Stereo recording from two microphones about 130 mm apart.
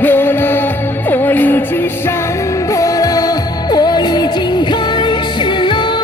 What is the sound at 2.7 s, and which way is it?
Music, 25° left (ahead or behind).